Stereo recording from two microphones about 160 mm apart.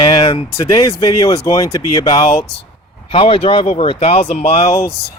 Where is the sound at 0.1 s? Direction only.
30° left (ahead or behind).